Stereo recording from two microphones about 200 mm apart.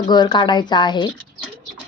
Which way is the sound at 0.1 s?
20° left (ahead or behind).